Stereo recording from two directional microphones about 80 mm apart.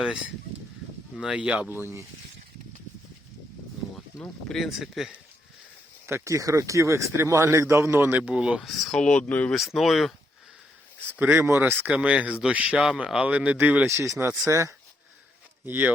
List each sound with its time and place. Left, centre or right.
0.0 s speech: centre
1.7 s speech: right
4.4 s speech: centre
6.1 s speech: right
8.3 s speech: centre
8.6 s speech: centre
9.5 s speech: centre
11.2 s speech: right
13.9 s speech: right
15.6 s speech: right